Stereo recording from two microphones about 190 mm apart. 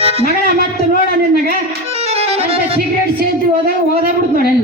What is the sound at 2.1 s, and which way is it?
Violin, 30° right (ahead or behind).